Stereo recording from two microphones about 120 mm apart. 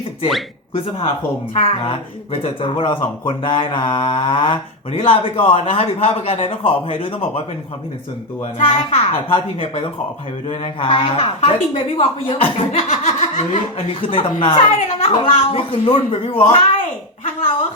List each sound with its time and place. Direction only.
1.5 s speech: 55° left (ahead or behind)
8.6 s speech: 50° left (ahead or behind)
12.9 s snicker: 65° left (ahead or behind)
14.0 s speech: 45° left (ahead or behind)